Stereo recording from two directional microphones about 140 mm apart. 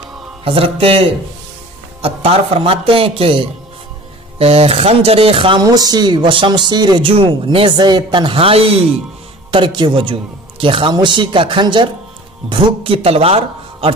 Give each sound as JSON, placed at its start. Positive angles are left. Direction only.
{"t": 0.4, "sound": "speech", "side_deg": -40}
{"t": 5.6, "sound": "speech", "side_deg": -25}
{"t": 9.5, "sound": "speech", "side_deg": -35}